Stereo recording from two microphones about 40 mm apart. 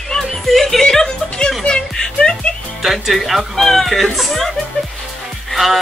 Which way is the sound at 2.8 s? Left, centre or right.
Centre.